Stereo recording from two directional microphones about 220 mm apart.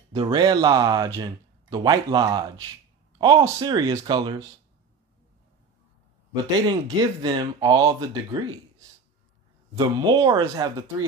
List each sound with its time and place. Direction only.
0.1 s speech: 20° right (ahead or behind)
6.6 s speech: 20° right (ahead or behind)